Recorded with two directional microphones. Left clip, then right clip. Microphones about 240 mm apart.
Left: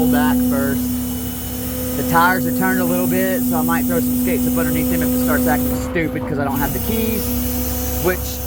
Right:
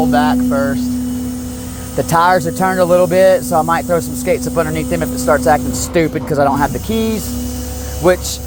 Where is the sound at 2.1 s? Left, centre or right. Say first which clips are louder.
Right 4 dB; right.